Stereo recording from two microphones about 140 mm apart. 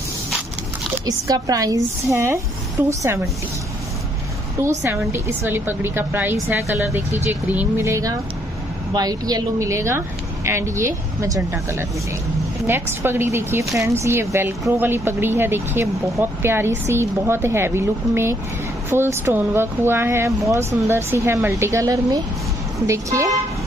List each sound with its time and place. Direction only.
1.0 s speech: 25° right (ahead or behind)
4.6 s speech: 20° right (ahead or behind)
12.6 s speech: 15° right (ahead or behind)